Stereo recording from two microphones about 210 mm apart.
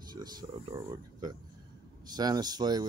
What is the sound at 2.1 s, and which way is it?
Speech, 20° right (ahead or behind).